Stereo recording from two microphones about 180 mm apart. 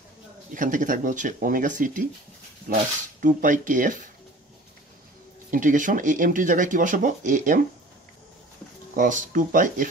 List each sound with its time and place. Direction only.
0.6 s speech: 45° right (ahead or behind)
5.5 s speech: 45° right (ahead or behind)
8.9 s speech: 45° right (ahead or behind)